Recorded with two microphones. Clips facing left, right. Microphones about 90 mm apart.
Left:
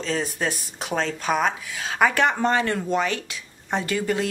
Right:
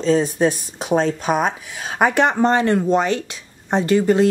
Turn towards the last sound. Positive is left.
turn(degrees=-25)  # may be behind; listen again after turning